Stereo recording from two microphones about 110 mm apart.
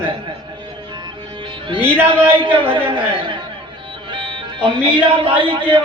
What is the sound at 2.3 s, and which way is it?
Music, 50° right (ahead or behind).